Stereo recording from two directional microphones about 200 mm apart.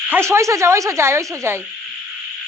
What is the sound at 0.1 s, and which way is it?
Speech, 15° right (ahead or behind).